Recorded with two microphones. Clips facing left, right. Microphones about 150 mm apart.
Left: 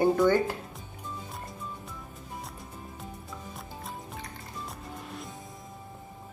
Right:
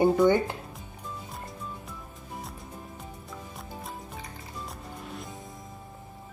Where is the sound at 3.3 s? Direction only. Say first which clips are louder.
Right 1 dB; centre (ahead or behind).